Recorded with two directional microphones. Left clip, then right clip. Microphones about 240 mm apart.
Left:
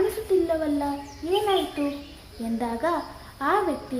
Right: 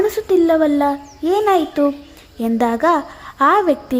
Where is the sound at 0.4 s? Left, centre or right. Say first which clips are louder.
Right 11 dB; right.